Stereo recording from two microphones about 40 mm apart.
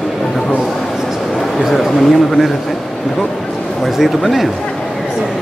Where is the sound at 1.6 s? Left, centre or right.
Centre.